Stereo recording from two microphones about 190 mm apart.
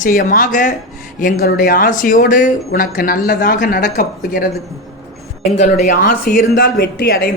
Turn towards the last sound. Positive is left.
turn(degrees=55)  # may be behind; listen again after turning